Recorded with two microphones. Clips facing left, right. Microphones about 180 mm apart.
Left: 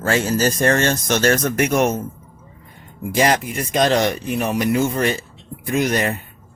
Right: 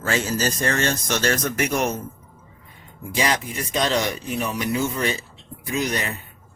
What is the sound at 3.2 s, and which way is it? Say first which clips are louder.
A man's voice: left 6 dB; 50° left (ahead or behind).